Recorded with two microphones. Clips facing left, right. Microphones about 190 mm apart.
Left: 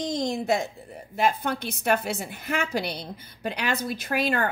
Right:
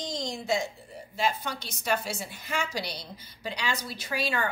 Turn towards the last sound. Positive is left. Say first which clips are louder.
# left 5 dB
turn(degrees=55)  # may be behind; listen again after turning